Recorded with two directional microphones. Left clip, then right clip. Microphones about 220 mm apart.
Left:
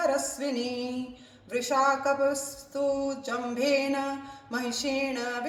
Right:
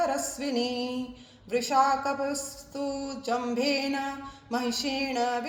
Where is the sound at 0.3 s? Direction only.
25° right (ahead or behind).